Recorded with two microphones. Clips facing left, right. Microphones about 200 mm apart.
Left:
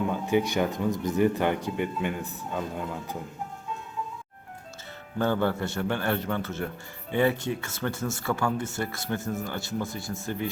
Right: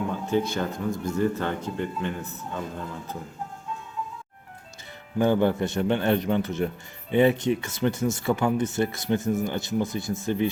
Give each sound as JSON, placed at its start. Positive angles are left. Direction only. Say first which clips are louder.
{"t": 0.3, "sound": "speech", "louder": "left 1 dB", "side_deg": 15}
{"t": 5.1, "sound": "speech", "louder": "right 4 dB", "side_deg": -15}